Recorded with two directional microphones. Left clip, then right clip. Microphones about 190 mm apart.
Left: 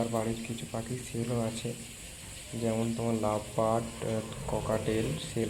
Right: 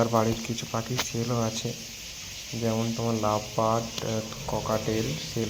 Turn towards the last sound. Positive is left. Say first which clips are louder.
# right 3 dB
turn(degrees=-5)  # may be behind; listen again after turning